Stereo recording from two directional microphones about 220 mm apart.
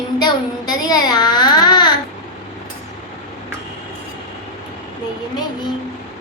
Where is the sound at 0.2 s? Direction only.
20° left (ahead or behind).